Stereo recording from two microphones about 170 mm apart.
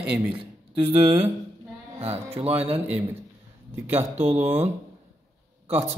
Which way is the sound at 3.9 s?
40° right (ahead or behind).